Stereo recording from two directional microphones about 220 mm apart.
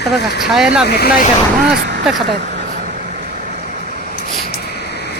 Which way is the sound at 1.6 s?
45° right (ahead or behind).